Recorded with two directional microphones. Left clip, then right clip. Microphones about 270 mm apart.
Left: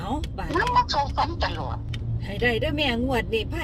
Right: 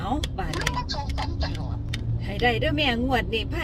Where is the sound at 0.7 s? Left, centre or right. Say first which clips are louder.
Left 10 dB; left.